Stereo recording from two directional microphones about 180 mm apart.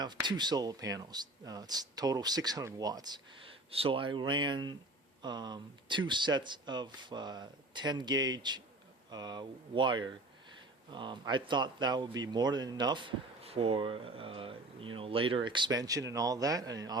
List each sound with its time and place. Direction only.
0.3 s a man's voice: 25° right (ahead or behind)